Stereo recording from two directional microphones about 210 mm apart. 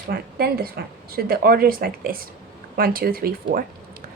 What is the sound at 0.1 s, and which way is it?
A woman's voice, 45° right (ahead or behind).